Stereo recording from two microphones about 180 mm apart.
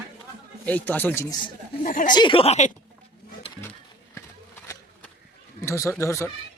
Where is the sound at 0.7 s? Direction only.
10° left (ahead or behind).